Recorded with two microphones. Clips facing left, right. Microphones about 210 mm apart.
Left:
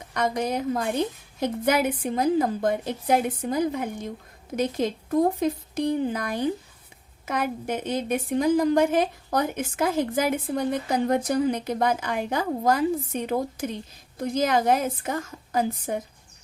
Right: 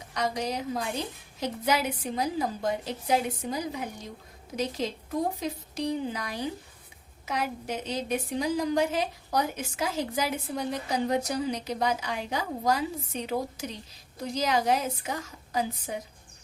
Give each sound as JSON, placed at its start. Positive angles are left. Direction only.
{"t": 0.1, "sound": "a woman's voice", "side_deg": 55}